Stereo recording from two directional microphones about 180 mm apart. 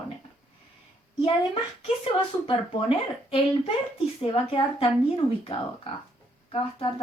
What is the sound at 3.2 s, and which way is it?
A woman's voice, 30° left (ahead or behind).